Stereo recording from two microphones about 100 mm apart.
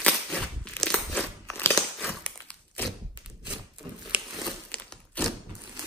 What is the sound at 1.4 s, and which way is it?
Biting, 25° left (ahead or behind).